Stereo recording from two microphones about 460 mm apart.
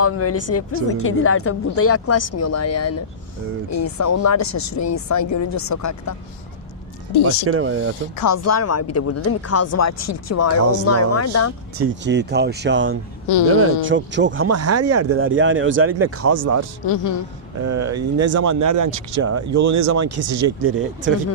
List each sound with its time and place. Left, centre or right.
0.0 s speech: left
7.4 s speech: right
8.1 s speech: left
11.8 s speech: right
13.2 s speech: left
13.6 s speech: right
16.8 s a man's voice: left
17.6 s speech: right